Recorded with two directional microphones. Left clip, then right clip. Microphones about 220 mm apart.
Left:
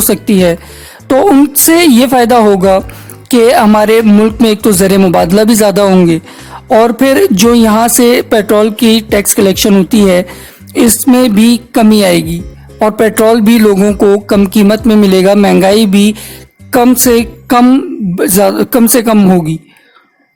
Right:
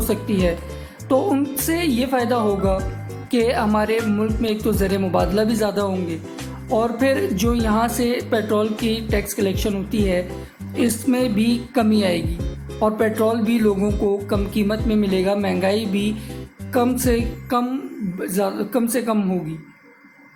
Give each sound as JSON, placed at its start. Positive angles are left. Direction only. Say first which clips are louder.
{"t": 0.1, "sound": "speech", "louder": "left 12 dB", "side_deg": 45}